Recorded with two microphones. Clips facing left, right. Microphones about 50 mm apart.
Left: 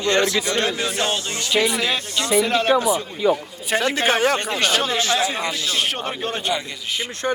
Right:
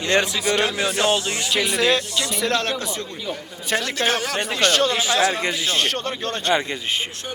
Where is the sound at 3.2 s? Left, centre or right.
Left.